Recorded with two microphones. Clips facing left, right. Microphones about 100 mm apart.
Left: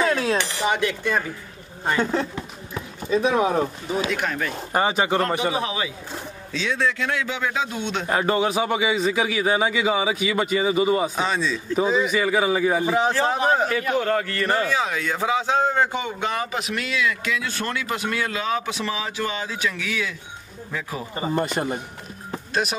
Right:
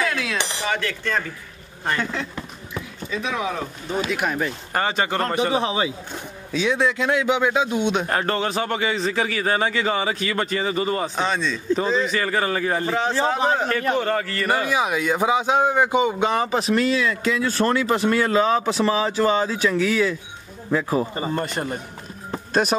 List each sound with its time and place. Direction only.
0.0 s dishes: 35° left (ahead or behind)
0.7 s a man's voice: 15° left (ahead or behind)
3.1 s speech: 40° left (ahead or behind)
4.1 s a man's voice: 10° right (ahead or behind)
4.7 s a man's voice: 10° left (ahead or behind)
5.5 s a man's voice: 30° right (ahead or behind)
6.5 s a man's voice: 15° right (ahead or behind)
8.1 s a man's voice: 10° left (ahead or behind); by 21.3 s 35° right (ahead or behind)
21.4 s a man's voice: 15° left (ahead or behind)
22.5 s speech: 40° right (ahead or behind)